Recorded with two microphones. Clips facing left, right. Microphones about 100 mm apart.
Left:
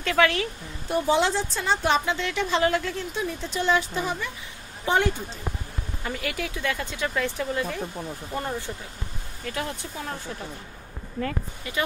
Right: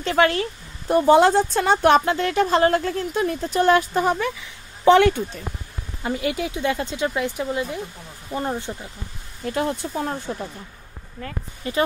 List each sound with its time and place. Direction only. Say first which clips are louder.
0.0 s a woman's voice: right 3 dB; 30° right (ahead or behind); by 4.3 s 55° right (ahead or behind)
4.8 s speech: right 9 dB; 70° right (ahead or behind)
6.0 s speech: right 7 dB; 25° right (ahead or behind)
11.6 s a woman's voice: right 7 dB; 35° right (ahead or behind)